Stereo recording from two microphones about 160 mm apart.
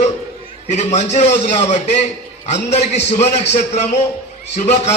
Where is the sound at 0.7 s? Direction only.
45° left (ahead or behind).